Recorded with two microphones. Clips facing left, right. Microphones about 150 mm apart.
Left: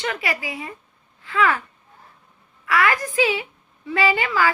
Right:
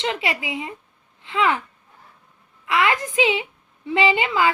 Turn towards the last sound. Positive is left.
turn(degrees=-20)  # may be behind; listen again after turning